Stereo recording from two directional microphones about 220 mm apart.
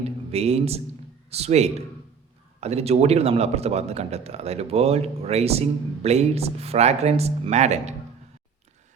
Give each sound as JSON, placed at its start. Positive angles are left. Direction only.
{"t": 0.3, "sound": "speech", "side_deg": -30}